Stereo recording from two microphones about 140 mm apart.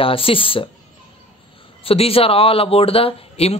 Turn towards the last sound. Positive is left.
turn(degrees=45)  # may be behind; listen again after turning